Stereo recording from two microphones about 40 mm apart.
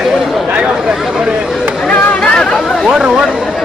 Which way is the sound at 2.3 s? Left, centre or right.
Left.